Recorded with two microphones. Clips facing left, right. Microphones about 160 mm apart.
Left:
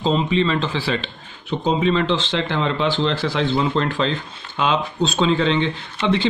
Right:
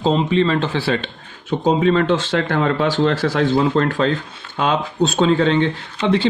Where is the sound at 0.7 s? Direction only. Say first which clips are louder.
Right 3 dB; 55° right (ahead or behind).